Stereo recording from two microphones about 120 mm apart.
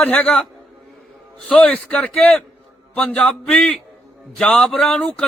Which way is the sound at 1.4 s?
10° left (ahead or behind).